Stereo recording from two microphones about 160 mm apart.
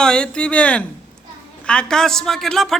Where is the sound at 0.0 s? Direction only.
5° left (ahead or behind).